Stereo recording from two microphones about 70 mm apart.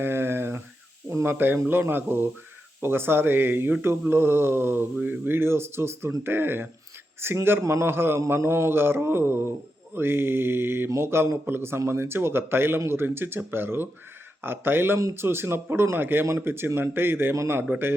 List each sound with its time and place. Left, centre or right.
0.0 s a sound: right
1.1 s speech: right
17.3 s a man's voice: right
17.7 s speech: right